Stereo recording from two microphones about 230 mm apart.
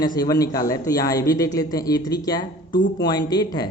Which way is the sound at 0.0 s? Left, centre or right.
Centre.